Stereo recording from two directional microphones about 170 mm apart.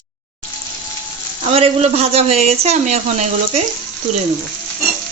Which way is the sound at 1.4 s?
35° right (ahead or behind).